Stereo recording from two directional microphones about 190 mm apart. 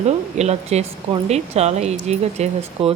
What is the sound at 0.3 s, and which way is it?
Speech, 35° right (ahead or behind).